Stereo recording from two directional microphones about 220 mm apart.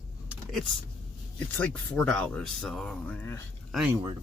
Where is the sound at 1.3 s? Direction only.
5° left (ahead or behind).